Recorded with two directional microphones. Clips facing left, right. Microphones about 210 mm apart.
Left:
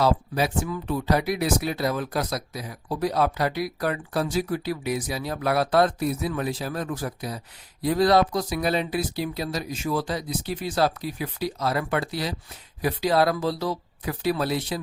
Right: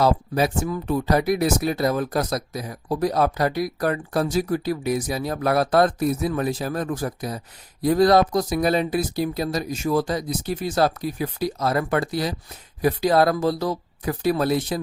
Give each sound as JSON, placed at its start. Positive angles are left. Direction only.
{"t": 0.0, "sound": "speech", "side_deg": -45}